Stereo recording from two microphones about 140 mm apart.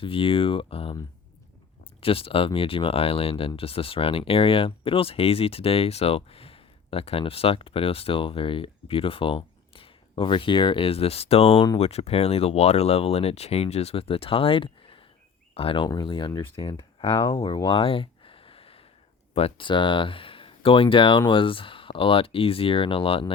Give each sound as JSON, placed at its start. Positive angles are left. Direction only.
{"t": 0.0, "sound": "speech", "side_deg": 40}